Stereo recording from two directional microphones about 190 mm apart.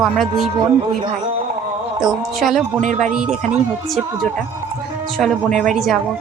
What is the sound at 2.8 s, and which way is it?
Speech, 40° right (ahead or behind).